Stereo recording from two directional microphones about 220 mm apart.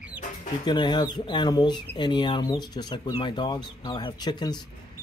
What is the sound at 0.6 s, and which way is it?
Speech, 20° left (ahead or behind).